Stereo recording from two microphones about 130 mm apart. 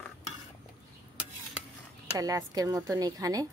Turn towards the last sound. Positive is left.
turn(degrees=-30)  # may be behind; listen again after turning